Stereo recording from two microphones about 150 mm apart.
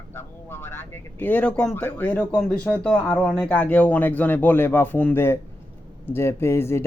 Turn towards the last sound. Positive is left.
turn(degrees=15)  # may be behind; listen again after turning